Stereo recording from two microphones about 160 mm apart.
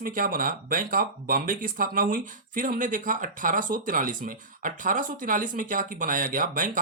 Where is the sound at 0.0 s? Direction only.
60° right (ahead or behind).